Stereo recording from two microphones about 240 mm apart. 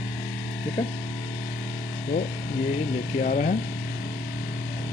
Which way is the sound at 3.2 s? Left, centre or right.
Left.